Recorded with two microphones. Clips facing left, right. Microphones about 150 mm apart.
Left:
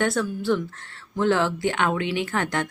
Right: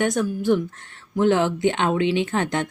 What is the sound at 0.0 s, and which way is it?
Speech, 15° right (ahead or behind).